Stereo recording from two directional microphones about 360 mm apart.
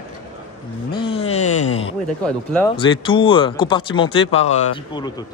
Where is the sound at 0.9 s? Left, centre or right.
Centre.